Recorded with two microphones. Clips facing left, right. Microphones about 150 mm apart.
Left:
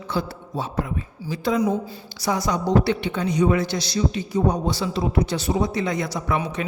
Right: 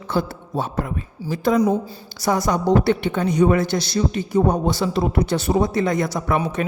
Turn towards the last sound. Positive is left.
turn(degrees=-50)  # may be behind; listen again after turning